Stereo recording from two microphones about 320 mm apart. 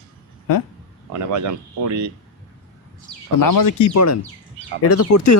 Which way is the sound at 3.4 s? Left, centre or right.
Left.